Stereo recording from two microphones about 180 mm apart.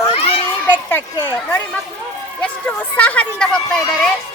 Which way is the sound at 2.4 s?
10° left (ahead or behind).